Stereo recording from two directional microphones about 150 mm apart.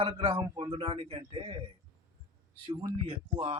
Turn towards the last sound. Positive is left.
turn(degrees=-40)  # may be behind; listen again after turning